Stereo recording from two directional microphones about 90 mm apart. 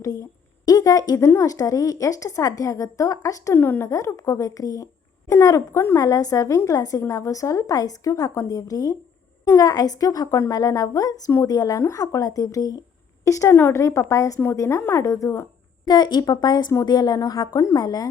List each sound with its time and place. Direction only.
0.0 s a sound: 40° left (ahead or behind)
1.2 s a woman's voice: 35° left (ahead or behind)
3.5 s speech: 25° left (ahead or behind)
3.8 s a woman's voice: 35° left (ahead or behind)
15.9 s a woman's voice: 50° left (ahead or behind)
17.6 s a woman's voice: 40° left (ahead or behind)